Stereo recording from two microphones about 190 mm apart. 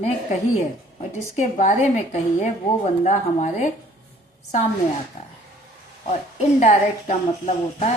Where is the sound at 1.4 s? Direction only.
40° left (ahead or behind).